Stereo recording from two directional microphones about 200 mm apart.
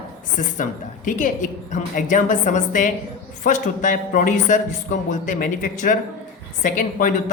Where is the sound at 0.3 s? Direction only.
40° left (ahead or behind).